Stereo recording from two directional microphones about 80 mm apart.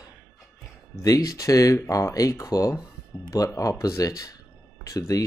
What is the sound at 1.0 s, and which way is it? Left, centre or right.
Speech, left.